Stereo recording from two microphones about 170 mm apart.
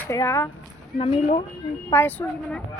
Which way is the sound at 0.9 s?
35° left (ahead or behind).